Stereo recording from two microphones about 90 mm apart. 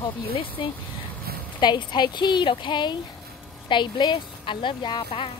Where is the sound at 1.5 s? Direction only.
55° left (ahead or behind).